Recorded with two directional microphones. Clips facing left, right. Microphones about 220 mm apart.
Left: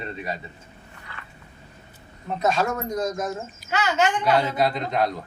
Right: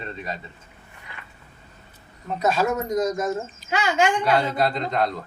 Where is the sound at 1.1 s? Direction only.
15° right (ahead or behind).